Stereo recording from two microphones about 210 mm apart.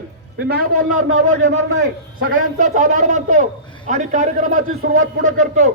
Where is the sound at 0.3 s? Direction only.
50° right (ahead or behind).